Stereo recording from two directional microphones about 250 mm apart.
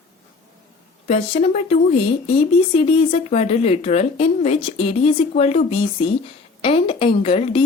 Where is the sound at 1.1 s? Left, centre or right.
Left.